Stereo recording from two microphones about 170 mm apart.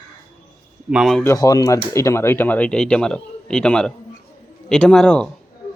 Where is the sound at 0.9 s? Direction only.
Centre (ahead or behind).